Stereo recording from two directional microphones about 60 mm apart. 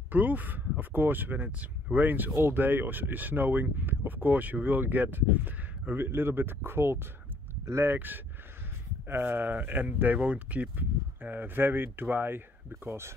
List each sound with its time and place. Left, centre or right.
0.1 s speech: right